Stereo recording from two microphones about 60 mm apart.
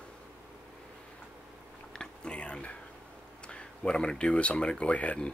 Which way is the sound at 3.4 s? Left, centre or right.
Centre.